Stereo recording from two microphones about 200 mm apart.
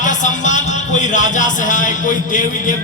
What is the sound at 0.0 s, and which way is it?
A man's voice, 40° left (ahead or behind).